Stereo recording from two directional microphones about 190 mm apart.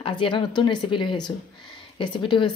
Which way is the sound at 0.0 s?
25° left (ahead or behind).